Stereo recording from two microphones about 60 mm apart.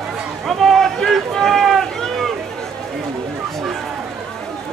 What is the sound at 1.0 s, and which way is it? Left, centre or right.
Run, centre.